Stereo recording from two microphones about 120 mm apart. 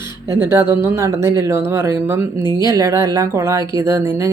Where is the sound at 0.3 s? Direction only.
20° right (ahead or behind).